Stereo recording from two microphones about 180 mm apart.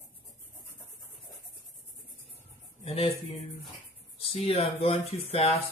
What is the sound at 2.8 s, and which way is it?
Speech, 30° left (ahead or behind).